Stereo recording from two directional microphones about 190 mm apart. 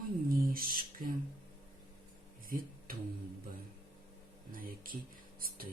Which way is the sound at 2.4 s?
50° right (ahead or behind).